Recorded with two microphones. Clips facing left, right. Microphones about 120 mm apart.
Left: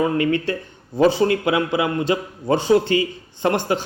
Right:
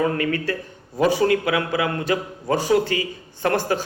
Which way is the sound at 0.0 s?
25° left (ahead or behind).